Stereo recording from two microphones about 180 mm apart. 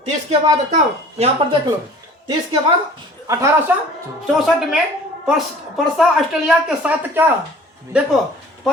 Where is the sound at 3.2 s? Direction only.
15° right (ahead or behind).